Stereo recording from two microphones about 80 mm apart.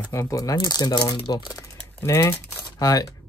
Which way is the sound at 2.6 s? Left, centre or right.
Left.